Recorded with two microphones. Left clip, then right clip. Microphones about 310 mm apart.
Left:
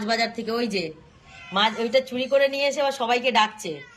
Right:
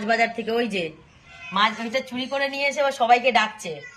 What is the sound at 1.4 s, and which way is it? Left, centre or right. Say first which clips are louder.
A woman's voice: even; centre.